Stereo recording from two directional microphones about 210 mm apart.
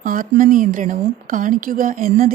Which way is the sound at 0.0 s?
40° right (ahead or behind).